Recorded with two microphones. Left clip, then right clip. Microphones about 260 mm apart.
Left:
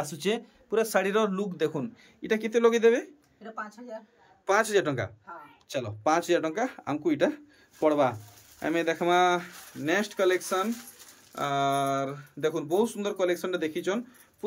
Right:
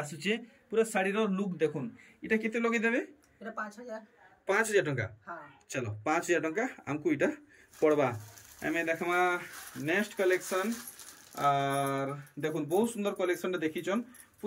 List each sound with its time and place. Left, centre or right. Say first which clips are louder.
0.3 s speech: left 4 dB; centre
4.5 s speech: left 4 dB; centre